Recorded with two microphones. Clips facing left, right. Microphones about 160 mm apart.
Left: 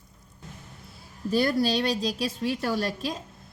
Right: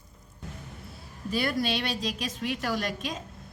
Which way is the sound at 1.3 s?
35° left (ahead or behind).